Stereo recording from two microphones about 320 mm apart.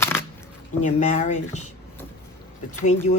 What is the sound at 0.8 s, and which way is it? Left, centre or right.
Speech, left.